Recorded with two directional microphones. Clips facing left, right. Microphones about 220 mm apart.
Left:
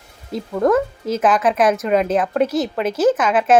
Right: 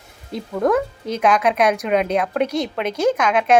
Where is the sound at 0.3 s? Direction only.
Centre (ahead or behind).